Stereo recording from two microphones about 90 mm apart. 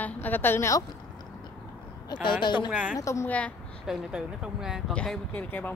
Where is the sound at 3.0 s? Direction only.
35° left (ahead or behind).